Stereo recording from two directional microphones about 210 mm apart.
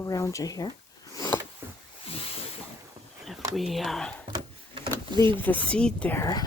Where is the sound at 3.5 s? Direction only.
Centre (ahead or behind).